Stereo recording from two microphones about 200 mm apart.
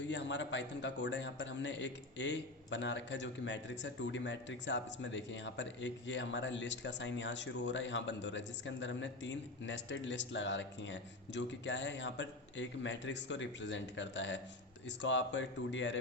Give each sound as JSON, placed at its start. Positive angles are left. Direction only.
{"t": 0.1, "sound": "a man's voice", "side_deg": 65}